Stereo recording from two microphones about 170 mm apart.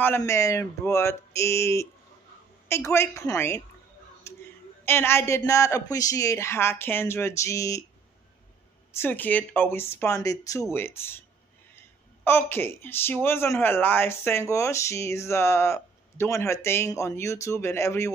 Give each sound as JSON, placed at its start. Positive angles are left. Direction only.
{"t": 0.0, "sound": "speech", "side_deg": 15}
{"t": 4.2, "sound": "a sound", "side_deg": 15}
{"t": 4.8, "sound": "speech", "side_deg": 15}
{"t": 8.9, "sound": "speech", "side_deg": 10}
{"t": 12.3, "sound": "speech", "side_deg": 15}